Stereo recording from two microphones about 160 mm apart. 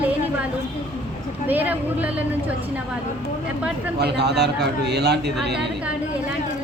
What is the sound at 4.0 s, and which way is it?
Speech, 90° right.